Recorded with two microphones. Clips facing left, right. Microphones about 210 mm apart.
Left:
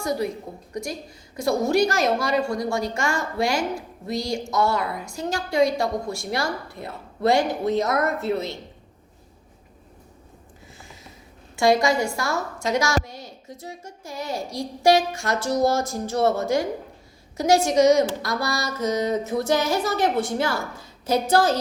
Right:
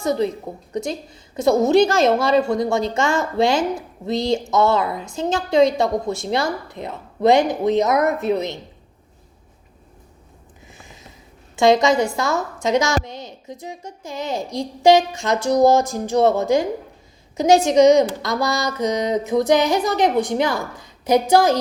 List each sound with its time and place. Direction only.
0.0 s a woman's voice: 25° right (ahead or behind)
11.5 s a woman's voice: 20° right (ahead or behind)